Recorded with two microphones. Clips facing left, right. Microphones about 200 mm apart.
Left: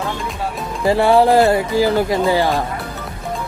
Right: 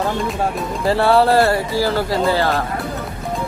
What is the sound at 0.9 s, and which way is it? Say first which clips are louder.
Speech: left 2 dB; 15° left (ahead or behind).